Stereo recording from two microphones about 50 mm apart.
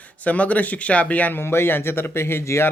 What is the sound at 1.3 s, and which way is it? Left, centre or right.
Speech, left.